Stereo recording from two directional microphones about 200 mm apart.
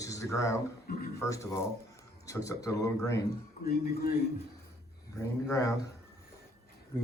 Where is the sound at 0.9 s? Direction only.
50° left (ahead or behind).